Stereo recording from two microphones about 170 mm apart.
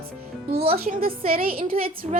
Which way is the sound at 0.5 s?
65° right (ahead or behind).